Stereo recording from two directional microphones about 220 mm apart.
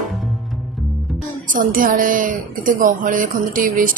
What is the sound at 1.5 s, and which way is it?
A woman's voice, 35° right (ahead or behind).